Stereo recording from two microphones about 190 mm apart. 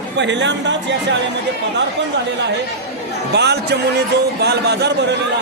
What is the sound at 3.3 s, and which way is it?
Speech, 60° right (ahead or behind).